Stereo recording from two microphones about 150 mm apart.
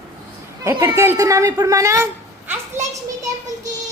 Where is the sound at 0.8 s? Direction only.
15° right (ahead or behind).